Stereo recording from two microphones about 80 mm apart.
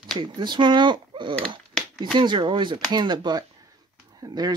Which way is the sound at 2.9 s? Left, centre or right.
Right.